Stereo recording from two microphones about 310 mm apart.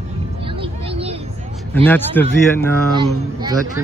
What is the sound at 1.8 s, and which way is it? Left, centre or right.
Speech, centre.